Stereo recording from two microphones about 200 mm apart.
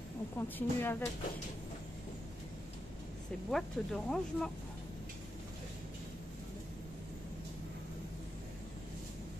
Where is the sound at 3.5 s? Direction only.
Centre (ahead or behind).